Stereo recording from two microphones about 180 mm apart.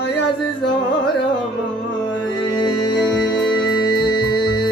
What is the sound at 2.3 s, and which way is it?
Music, 25° left (ahead or behind).